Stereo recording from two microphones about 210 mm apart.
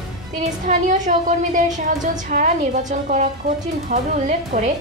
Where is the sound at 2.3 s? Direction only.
35° right (ahead or behind).